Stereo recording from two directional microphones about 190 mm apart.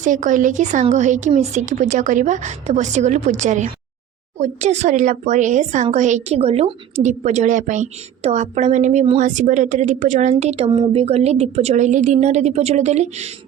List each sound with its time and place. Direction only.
0.0 s a woman's voice: 40° right (ahead or behind)